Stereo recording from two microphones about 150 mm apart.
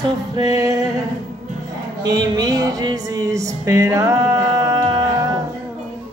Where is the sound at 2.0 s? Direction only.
25° right (ahead or behind).